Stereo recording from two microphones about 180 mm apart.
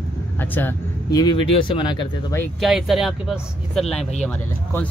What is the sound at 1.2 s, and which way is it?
Speech, 25° left (ahead or behind).